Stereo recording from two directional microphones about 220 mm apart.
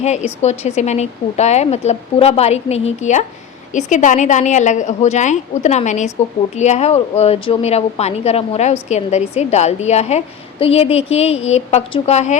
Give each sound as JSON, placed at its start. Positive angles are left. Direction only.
{"t": 0.0, "sound": "a woman's voice", "side_deg": 30}